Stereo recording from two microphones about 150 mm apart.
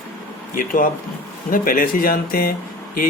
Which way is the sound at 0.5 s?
65° left (ahead or behind).